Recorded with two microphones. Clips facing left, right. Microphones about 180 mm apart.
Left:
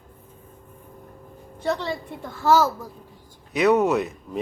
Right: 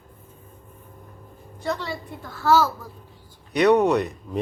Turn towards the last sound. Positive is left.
turn(degrees=0)  # may be behind; listen again after turning